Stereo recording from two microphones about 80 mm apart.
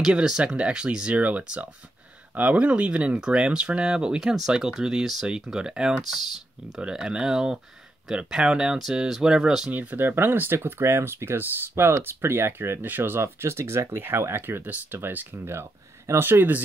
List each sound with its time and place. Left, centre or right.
0.0 s speech: centre
9.7 s speech: right